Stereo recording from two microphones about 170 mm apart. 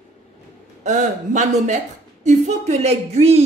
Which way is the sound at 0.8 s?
45° right (ahead or behind).